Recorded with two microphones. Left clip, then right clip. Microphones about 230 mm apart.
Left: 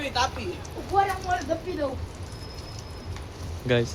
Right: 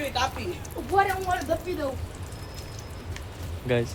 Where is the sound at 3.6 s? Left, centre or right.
Centre.